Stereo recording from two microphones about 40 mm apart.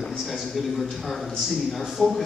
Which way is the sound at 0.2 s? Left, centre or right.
Centre.